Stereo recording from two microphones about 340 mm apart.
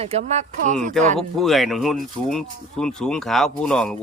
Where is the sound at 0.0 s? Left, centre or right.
Centre.